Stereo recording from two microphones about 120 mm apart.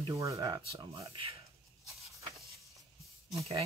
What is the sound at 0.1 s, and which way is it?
Speech, 25° right (ahead or behind).